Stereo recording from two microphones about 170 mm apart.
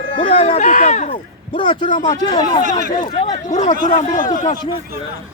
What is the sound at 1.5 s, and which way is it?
Speech, 25° left (ahead or behind).